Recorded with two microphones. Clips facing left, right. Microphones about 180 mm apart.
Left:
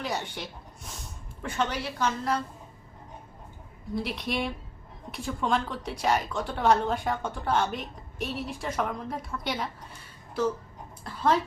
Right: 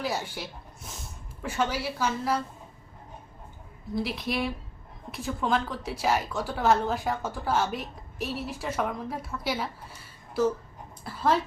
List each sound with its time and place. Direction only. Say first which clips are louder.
0.0 s a woman's voice: right 1 dB; 5° right (ahead or behind)
3.9 s a woman's voice: right 1 dB; centre (ahead or behind)
11.0 s speech: even; 5° right (ahead or behind)